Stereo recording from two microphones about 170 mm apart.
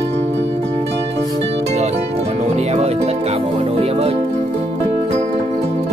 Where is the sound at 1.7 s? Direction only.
40° right (ahead or behind).